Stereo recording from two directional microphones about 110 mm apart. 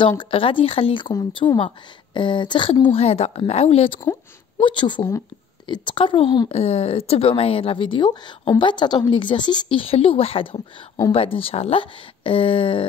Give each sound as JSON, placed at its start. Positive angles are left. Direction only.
{"t": 0.2, "sound": "a woman's voice", "side_deg": 55}
{"t": 4.6, "sound": "a woman's voice", "side_deg": 45}
{"t": 6.5, "sound": "a woman's voice", "side_deg": 65}